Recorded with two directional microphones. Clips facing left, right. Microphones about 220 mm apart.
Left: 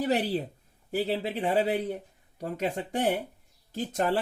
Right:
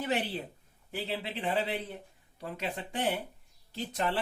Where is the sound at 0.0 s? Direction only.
40° left (ahead or behind).